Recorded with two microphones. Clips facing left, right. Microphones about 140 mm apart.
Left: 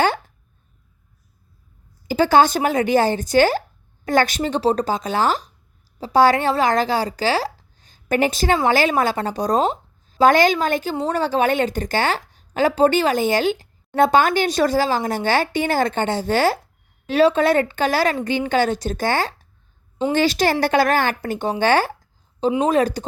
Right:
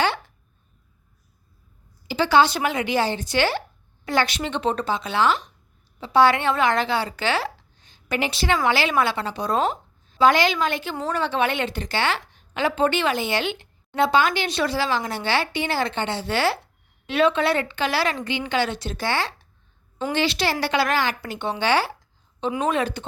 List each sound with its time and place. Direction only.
2.0 s a woman's voice: 45° left (ahead or behind)
22.5 s a woman's voice: 35° left (ahead or behind)